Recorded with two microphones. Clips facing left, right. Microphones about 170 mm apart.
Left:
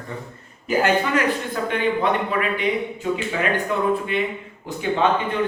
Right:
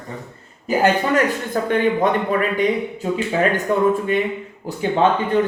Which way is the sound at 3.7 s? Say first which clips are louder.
Right 7 dB; 45° right (ahead or behind).